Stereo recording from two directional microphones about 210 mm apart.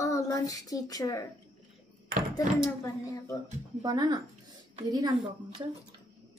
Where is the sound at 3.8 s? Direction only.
20° right (ahead or behind).